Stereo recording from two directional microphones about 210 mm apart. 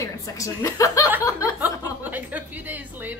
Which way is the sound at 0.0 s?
15° left (ahead or behind).